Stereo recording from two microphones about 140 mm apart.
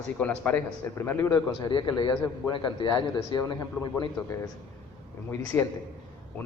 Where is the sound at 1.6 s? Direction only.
30° left (ahead or behind).